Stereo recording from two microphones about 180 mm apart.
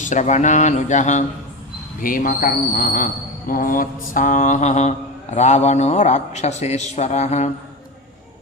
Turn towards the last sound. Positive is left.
turn(degrees=40)  # may be behind; listen again after turning